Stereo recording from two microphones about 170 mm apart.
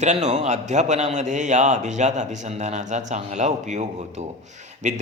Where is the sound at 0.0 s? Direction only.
45° right (ahead or behind).